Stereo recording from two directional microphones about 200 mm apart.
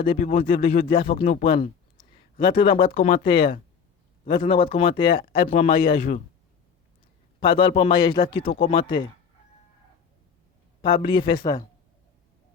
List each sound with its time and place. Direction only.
0.0 s speech: 25° left (ahead or behind)
7.3 s speech: 25° left (ahead or behind)
10.8 s speech: 25° left (ahead or behind)